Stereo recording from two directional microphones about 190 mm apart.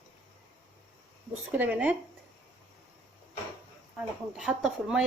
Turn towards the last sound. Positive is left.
turn(degrees=-5)  # may be behind; listen again after turning